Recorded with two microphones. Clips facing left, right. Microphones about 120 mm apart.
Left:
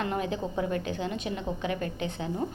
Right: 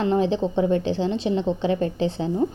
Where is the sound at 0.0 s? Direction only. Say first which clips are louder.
Right 9 dB; 30° right (ahead or behind).